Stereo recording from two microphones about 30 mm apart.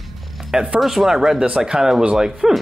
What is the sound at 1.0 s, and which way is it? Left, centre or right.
A man's voice, centre.